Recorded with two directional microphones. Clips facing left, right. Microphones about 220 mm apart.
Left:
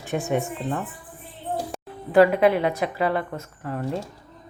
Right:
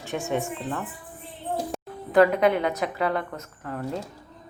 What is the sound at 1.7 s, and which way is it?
Music, 5° left (ahead or behind).